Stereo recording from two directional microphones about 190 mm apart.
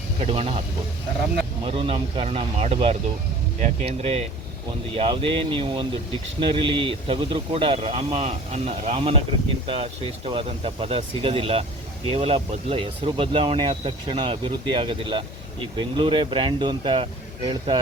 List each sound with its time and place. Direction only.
0.2 s speech: 30° right (ahead or behind)
1.6 s speech: 30° right (ahead or behind)